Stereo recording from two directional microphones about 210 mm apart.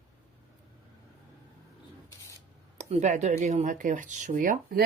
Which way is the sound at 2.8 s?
35° right (ahead or behind).